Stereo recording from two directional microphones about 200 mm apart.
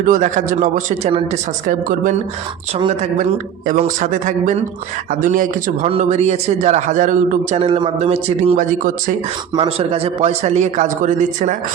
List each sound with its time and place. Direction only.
0.0 s a man's voice: 40° right (ahead or behind)
7.6 s a man's voice: 25° right (ahead or behind); by 9.1 s 40° right (ahead or behind)
9.6 s a man's voice: 30° right (ahead or behind)